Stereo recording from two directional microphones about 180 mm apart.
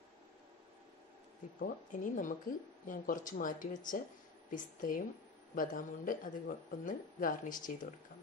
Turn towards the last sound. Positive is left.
turn(degrees=45)  # may be behind; listen again after turning